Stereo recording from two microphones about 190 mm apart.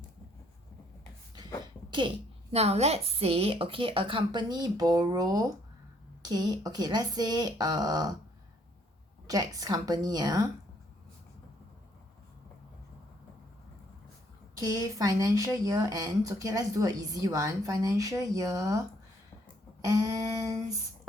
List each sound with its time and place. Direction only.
1.9 s speech: 25° right (ahead or behind)
9.2 s speech: 20° right (ahead or behind)
14.6 s speech: 20° right (ahead or behind)
19.8 s speech: 15° right (ahead or behind)